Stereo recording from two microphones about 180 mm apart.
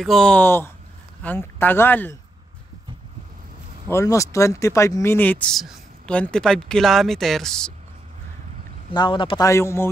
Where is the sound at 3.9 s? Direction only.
15° left (ahead or behind).